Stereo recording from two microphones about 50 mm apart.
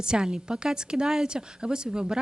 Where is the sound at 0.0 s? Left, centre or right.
Centre.